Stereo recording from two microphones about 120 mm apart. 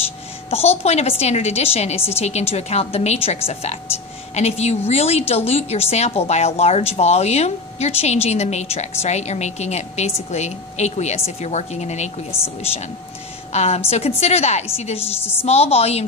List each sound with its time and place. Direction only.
0.5 s a woman's voice: 60° left (ahead or behind)
4.4 s a woman's voice: 65° left (ahead or behind)
13.5 s a woman's voice: 60° left (ahead or behind)
15.1 s a woman's voice: 20° left (ahead or behind)
15.4 s a woman's voice: 60° left (ahead or behind)